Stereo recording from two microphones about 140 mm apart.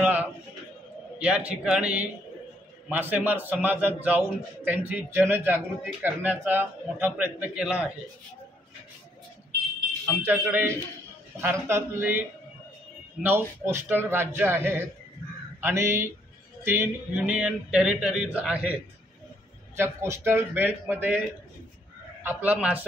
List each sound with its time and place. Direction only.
0.0 s a sound: 10° right (ahead or behind)
1.2 s a man's voice: 10° right (ahead or behind)
10.2 s a man's voice: 15° right (ahead or behind)
19.8 s a man's voice: 20° right (ahead or behind)
22.2 s a man's voice: 15° right (ahead or behind)